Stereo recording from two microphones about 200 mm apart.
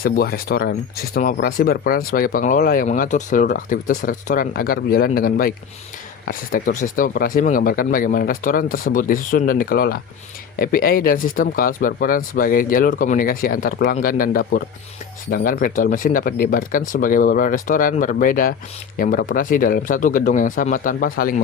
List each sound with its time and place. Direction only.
0.0 s speech: 50° left (ahead or behind)